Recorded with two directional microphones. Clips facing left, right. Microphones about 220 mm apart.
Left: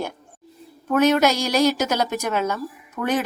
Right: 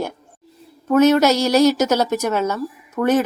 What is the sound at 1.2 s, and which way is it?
A woman's voice, 10° left (ahead or behind).